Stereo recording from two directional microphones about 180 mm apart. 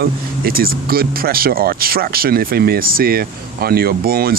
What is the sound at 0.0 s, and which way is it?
Speech, 55° right (ahead or behind).